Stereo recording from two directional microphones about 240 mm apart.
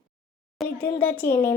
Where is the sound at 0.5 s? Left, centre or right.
Centre.